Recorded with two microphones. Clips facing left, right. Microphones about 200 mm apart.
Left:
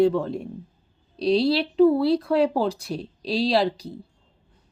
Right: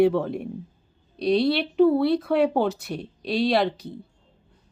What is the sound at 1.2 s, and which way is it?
Speech, 55° right (ahead or behind).